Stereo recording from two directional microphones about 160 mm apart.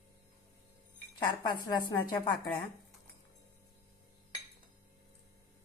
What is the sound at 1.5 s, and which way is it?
A woman's voice, 25° left (ahead or behind).